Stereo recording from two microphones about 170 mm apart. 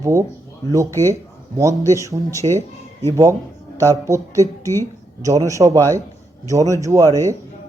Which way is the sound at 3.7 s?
20° right (ahead or behind).